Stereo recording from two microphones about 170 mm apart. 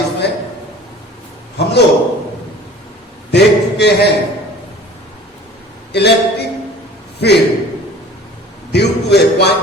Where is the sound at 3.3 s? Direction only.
80° left.